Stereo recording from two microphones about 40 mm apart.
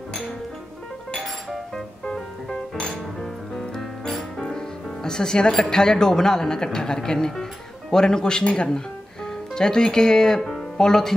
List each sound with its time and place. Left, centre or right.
2.8 s music: centre
4.1 s speech: centre